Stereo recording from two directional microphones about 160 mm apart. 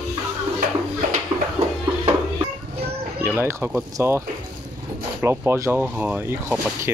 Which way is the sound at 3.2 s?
15° right (ahead or behind).